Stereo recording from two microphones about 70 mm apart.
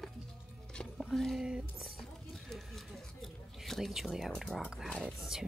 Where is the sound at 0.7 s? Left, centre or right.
Centre.